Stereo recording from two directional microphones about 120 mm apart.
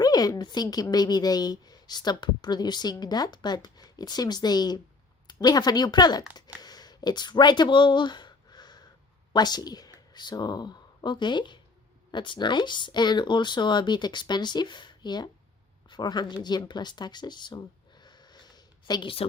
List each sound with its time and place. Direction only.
0.0 s a woman's voice: 30° left (ahead or behind)
6.3 s a sound: 35° left (ahead or behind)
9.3 s a woman's voice: 35° left (ahead or behind)